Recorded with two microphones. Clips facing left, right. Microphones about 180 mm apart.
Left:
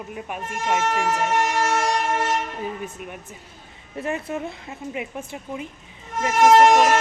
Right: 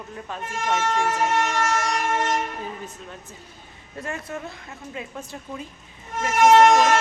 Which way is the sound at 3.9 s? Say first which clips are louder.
Left 5 dB; 20° left (ahead or behind).